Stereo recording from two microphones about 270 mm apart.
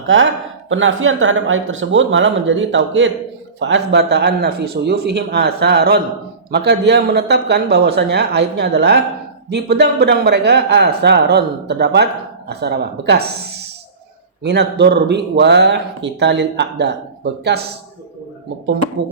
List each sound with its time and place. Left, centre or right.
0.1 s speech: right